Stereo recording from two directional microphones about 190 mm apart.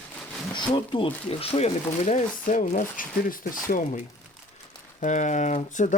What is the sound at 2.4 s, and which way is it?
Speech, 45° left (ahead or behind).